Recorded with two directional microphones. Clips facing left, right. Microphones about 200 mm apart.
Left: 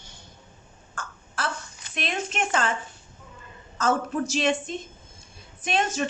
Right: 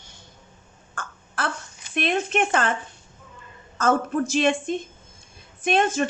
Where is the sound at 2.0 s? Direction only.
55° right (ahead or behind).